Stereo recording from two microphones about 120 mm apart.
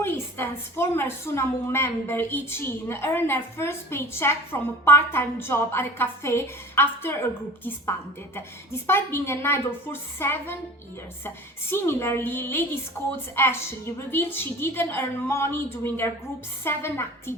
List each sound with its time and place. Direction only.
0.0 s a woman's voice: 20° left (ahead or behind)
11.7 s a woman's voice: 20° left (ahead or behind)